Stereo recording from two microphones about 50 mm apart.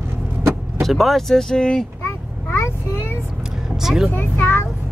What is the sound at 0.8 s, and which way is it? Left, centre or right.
Speech, centre.